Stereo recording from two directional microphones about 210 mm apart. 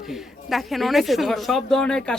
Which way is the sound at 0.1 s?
Centre (ahead or behind).